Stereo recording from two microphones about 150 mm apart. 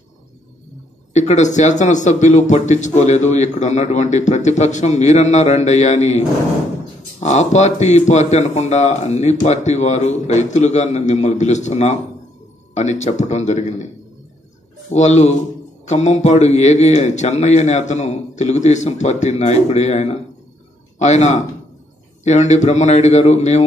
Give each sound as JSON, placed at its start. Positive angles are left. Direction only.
{"t": 1.1, "sound": "speech", "side_deg": 50}
{"t": 14.9, "sound": "speech", "side_deg": 50}